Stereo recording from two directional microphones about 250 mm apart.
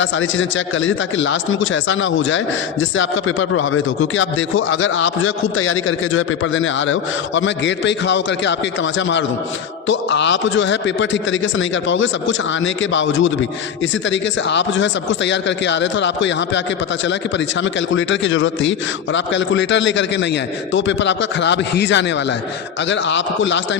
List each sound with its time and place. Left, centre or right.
0.0 s speech: left